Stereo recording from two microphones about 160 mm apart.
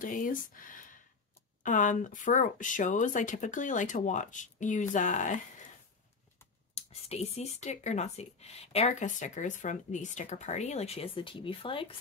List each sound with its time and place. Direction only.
0.0 s speech: 55° left (ahead or behind)
6.7 s speech: 40° left (ahead or behind)